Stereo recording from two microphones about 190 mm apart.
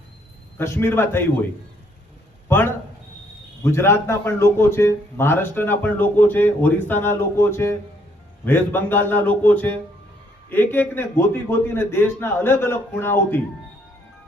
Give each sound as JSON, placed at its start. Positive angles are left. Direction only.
{"t": 0.6, "sound": "a man's voice", "side_deg": 15}
{"t": 2.5, "sound": "a sound", "side_deg": 10}
{"t": 3.6, "sound": "a man's voice", "side_deg": 15}